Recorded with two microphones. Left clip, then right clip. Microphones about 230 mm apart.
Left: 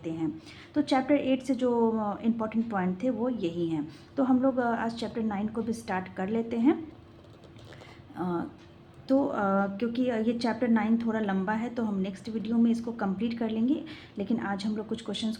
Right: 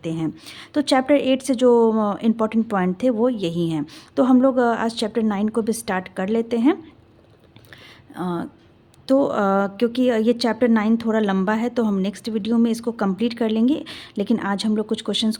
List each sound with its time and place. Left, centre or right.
0.0 s speech: right
8.1 s speech: right